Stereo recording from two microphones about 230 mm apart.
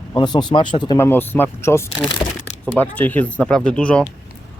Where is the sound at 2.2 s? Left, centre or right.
Centre.